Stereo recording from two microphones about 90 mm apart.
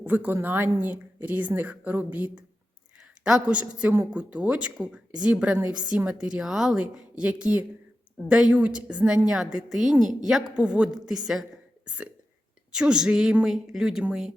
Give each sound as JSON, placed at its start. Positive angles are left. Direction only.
{"t": 0.0, "sound": "a woman's voice", "side_deg": -20}
{"t": 12.7, "sound": "a woman's voice", "side_deg": -10}